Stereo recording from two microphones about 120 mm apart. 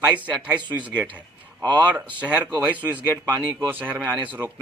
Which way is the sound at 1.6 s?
35° right (ahead or behind).